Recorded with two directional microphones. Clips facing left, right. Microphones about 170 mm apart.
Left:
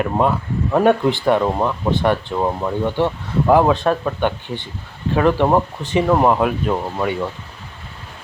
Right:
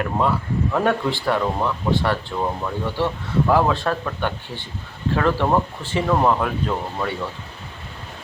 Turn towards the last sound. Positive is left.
turn(degrees=20)  # may be behind; listen again after turning